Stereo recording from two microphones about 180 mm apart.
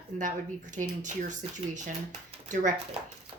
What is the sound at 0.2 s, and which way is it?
Speech, 45° right (ahead or behind).